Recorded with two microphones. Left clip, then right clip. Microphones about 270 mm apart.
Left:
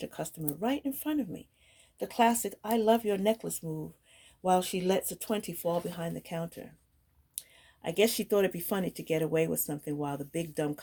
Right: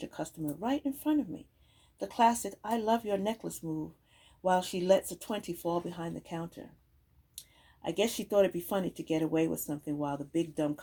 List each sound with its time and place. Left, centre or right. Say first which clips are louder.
0.0 s speech: even; left